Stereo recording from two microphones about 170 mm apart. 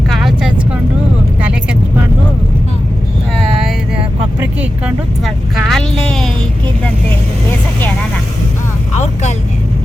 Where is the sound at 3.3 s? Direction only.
Centre (ahead or behind).